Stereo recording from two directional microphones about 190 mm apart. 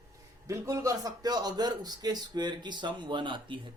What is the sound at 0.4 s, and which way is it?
A man's voice, 15° right (ahead or behind).